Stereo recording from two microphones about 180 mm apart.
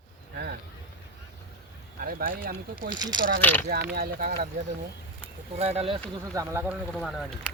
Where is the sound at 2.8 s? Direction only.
25° right (ahead or behind).